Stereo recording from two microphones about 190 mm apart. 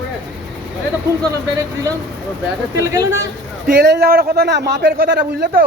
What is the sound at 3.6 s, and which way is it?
A man's voice, 60° right (ahead or behind).